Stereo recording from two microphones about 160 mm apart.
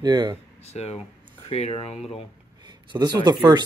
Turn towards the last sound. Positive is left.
turn(degrees=-25)  # may be behind; listen again after turning